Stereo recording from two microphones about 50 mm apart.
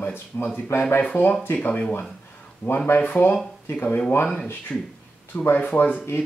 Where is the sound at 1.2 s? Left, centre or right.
Left.